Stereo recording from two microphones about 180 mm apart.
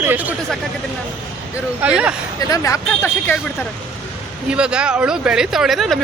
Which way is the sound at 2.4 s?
20° left (ahead or behind).